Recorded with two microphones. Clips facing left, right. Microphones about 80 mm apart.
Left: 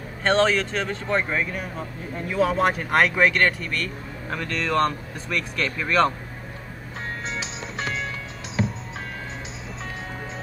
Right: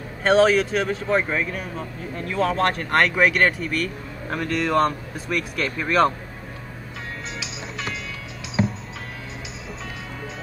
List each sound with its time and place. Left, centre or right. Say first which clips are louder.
0.2 s speech: right 4 dB; centre
7.2 s music: left 2 dB; left